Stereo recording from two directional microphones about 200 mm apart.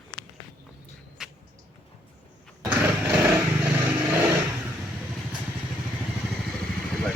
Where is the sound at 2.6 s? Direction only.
10° right (ahead or behind).